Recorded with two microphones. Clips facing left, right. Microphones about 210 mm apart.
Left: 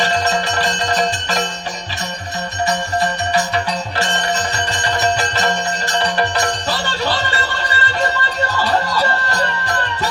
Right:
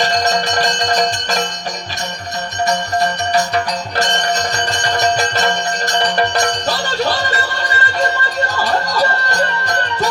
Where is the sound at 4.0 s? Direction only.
40° right (ahead or behind).